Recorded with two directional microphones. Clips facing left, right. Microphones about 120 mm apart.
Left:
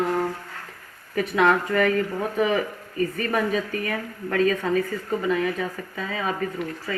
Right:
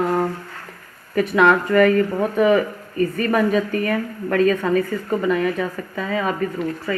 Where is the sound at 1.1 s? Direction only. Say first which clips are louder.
Right 4 dB; 65° right (ahead or behind).